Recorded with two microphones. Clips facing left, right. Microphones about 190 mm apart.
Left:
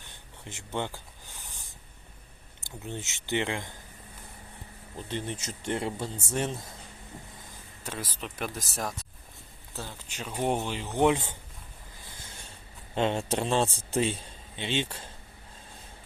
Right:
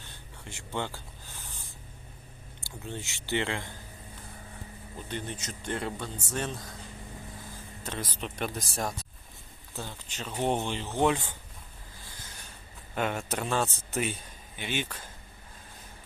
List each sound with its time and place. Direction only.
0.1 s a sound: 20° left (ahead or behind)
2.6 s speech: 20° left (ahead or behind)
5.0 s speech: 25° left (ahead or behind)
7.9 s speech: 5° left (ahead or behind)
12.0 s a sound: 25° left (ahead or behind)
12.9 s a man's voice: 25° left (ahead or behind)